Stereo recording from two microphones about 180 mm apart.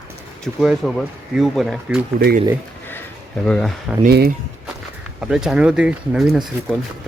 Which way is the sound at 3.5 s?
5° left (ahead or behind).